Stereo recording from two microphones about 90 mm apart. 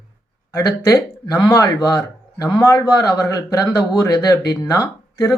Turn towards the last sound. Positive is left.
turn(degrees=40)  # may be behind; listen again after turning